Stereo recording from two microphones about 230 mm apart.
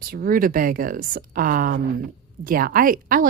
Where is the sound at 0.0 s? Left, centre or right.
Right.